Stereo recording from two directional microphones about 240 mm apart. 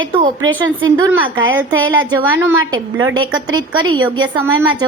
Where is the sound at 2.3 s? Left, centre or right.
Centre.